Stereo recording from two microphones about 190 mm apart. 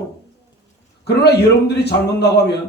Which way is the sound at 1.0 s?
60° left (ahead or behind).